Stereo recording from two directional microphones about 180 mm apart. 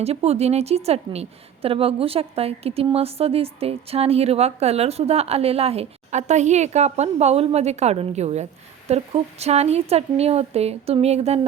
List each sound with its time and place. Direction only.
0.0 s a woman's voice: 35° right (ahead or behind)